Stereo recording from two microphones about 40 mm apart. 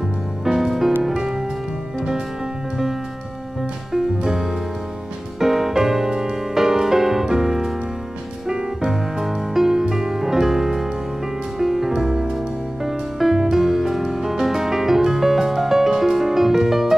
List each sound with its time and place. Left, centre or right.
0.5 s music: centre
3.9 s music: centre